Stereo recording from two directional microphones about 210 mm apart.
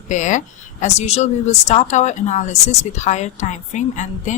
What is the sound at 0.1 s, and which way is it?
Speech, 35° left (ahead or behind).